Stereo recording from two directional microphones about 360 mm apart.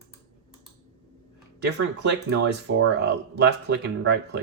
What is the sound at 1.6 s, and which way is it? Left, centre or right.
Speech, right.